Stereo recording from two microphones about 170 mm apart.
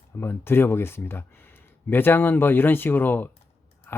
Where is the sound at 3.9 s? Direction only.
15° left (ahead or behind).